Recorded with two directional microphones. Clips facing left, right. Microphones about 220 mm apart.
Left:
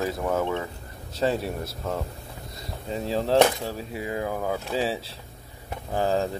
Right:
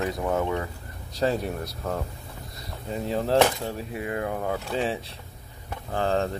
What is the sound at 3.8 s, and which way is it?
Speech, 30° left (ahead or behind).